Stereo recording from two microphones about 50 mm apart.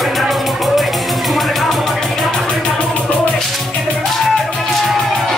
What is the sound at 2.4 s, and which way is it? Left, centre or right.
Music, centre.